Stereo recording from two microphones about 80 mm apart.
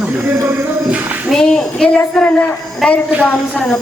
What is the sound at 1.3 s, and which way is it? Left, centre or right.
A woman's voice, centre.